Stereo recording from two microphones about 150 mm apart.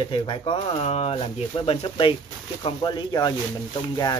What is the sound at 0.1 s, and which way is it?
Speech, 35° left (ahead or behind).